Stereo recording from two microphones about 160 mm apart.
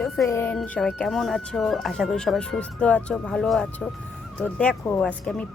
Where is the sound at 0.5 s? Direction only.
5° left (ahead or behind).